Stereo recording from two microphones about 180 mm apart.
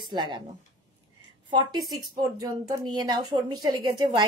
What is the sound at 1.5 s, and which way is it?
A woman's voice, 25° right (ahead or behind).